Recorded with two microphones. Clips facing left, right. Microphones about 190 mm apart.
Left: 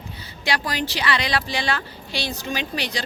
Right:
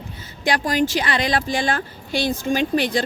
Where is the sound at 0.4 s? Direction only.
45° right (ahead or behind).